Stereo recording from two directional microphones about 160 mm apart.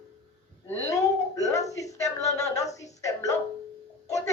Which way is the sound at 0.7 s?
20° left (ahead or behind).